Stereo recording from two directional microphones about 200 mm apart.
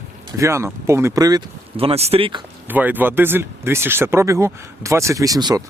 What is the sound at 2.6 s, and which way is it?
Speech, 10° right (ahead or behind).